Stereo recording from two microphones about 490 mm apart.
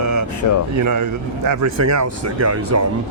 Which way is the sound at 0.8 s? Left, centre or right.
Right.